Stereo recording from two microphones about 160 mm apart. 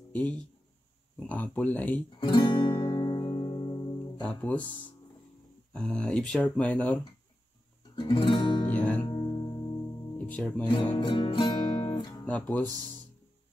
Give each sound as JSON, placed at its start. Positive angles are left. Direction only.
{"t": 0.1, "sound": "speech", "side_deg": 10}
{"t": 2.1, "sound": "music", "side_deg": 30}
{"t": 4.2, "sound": "speech", "side_deg": 5}
{"t": 7.9, "sound": "music", "side_deg": 30}
{"t": 8.7, "sound": "music", "side_deg": 10}
{"t": 9.0, "sound": "music", "side_deg": 25}
{"t": 10.1, "sound": "music", "side_deg": 10}
{"t": 10.6, "sound": "speech", "side_deg": 30}
{"t": 12.3, "sound": "speech", "side_deg": 10}